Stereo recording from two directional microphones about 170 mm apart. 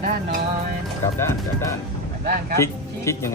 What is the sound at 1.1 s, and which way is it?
Speech, 15° left (ahead or behind).